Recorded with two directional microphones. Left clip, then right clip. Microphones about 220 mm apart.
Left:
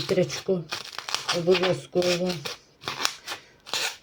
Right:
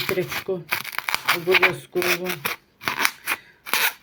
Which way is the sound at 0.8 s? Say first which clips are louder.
Right 6 dB; 35° right (ahead or behind).